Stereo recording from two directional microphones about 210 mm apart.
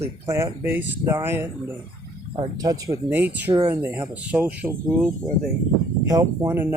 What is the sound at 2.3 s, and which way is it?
Speech, 20° right (ahead or behind).